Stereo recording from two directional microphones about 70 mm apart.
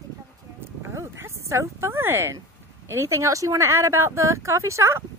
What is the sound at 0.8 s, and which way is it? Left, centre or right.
Speech, right.